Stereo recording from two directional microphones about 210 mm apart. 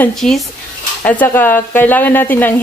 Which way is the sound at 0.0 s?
Centre (ahead or behind).